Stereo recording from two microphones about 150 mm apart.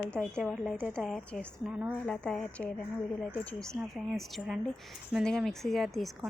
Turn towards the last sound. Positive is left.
turn(degrees=0)  # may be behind; listen again after turning